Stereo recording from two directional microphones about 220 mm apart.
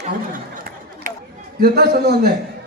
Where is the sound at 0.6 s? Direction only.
40° right (ahead or behind).